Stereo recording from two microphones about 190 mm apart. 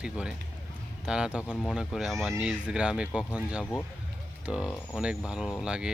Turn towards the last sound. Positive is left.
turn(degrees=-5)  # may be behind; listen again after turning